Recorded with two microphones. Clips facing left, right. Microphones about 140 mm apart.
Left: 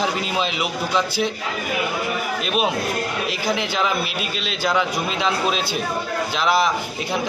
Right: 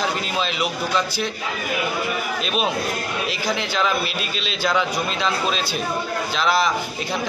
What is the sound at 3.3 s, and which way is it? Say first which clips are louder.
A man's voice: left 1 dB; 10° left (ahead or behind).